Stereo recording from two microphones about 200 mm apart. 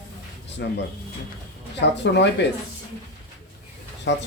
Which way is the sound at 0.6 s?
60° left (ahead or behind).